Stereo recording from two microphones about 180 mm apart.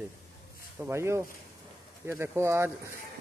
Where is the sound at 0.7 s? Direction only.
15° right (ahead or behind).